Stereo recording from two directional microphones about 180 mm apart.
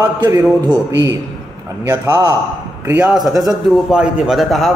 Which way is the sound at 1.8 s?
15° right (ahead or behind).